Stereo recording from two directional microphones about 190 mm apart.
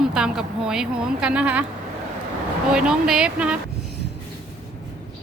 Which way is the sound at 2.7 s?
5° right (ahead or behind).